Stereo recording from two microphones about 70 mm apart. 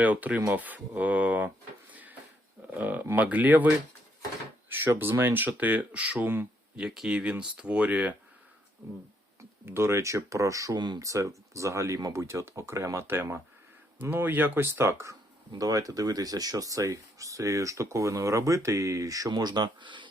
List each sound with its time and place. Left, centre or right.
0.0 s speech: right
1.9 s a sound: right
2.7 s speech: right
4.9 s speech: right
6.7 s speech: centre; by 8.1 s right
9.6 s speech: right
10.8 s speech: right
11.0 s speech: right
15.5 s speech: right
19.3 s speech: right